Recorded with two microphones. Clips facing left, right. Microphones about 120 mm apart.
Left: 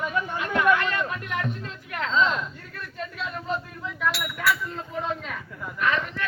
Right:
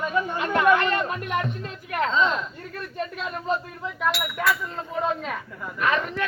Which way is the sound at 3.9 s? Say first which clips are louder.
Right 2 dB; 25° right (ahead or behind).